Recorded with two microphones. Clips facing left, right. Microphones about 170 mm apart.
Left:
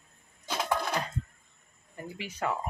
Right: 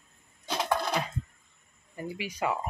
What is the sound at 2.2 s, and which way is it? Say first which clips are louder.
Speech: right 1 dB; 10° right (ahead or behind).